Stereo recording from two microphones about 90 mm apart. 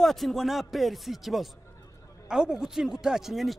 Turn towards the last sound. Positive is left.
turn(degrees=-5)  # may be behind; listen again after turning